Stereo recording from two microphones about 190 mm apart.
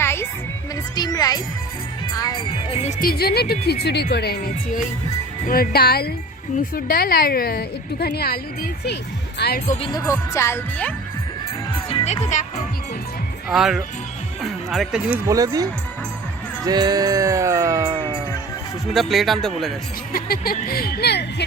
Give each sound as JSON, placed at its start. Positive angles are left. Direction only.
{"t": 0.0, "sound": "music", "side_deg": 15}
{"t": 0.9, "sound": "speech", "side_deg": 20}
{"t": 2.5, "sound": "speech", "side_deg": 30}
{"t": 3.0, "sound": "a woman's voice", "side_deg": 55}
{"t": 9.9, "sound": "speech", "side_deg": 15}
{"t": 11.9, "sound": "music", "side_deg": 30}
{"t": 13.5, "sound": "speech", "side_deg": 0}
{"t": 15.3, "sound": "speech", "side_deg": -20}
{"t": 16.6, "sound": "music", "side_deg": -20}
{"t": 17.9, "sound": "music", "side_deg": -25}
{"t": 18.9, "sound": "speech", "side_deg": 0}
{"t": 20.1, "sound": "a woman's voice", "side_deg": 50}